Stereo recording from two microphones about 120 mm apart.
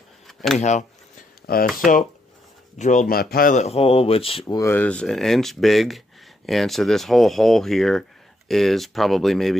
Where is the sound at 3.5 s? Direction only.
65° left (ahead or behind).